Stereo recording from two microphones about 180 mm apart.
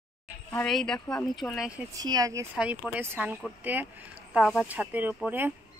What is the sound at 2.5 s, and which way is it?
Speech, 5° right (ahead or behind).